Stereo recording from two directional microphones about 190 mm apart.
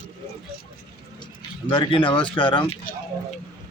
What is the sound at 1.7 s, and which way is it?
Speech, 25° left (ahead or behind).